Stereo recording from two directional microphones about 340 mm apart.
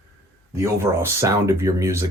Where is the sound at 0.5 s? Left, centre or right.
Centre.